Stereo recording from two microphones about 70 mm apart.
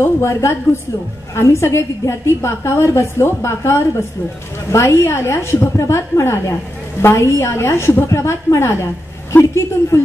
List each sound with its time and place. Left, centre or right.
0.2 s a woman's voice: left